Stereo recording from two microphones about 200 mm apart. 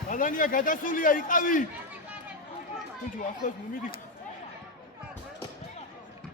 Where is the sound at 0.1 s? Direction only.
40° left (ahead or behind).